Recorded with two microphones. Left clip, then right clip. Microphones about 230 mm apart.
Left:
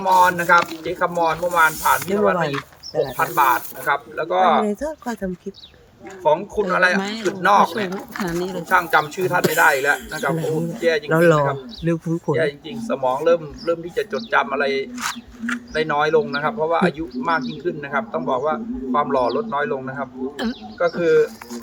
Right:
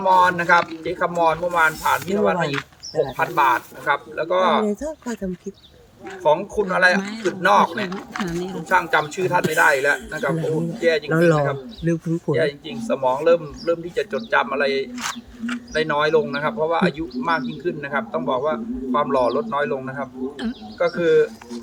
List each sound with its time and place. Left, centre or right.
0.0 s speech: centre
8.3 s speech: left
8.7 s speech: centre